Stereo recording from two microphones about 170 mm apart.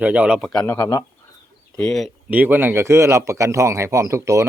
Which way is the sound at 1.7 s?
5° left (ahead or behind).